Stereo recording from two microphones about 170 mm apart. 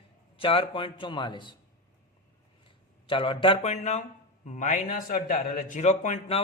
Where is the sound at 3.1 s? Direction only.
30° left (ahead or behind).